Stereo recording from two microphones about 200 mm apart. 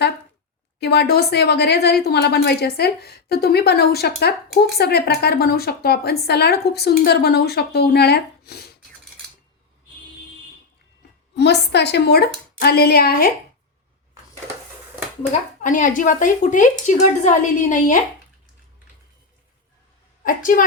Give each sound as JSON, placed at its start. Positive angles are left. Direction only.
{"t": 0.8, "sound": "a woman's voice", "side_deg": 55}
{"t": 11.3, "sound": "a woman's voice", "side_deg": 55}
{"t": 15.3, "sound": "speech", "side_deg": 40}
{"t": 20.2, "sound": "a woman's voice", "side_deg": 45}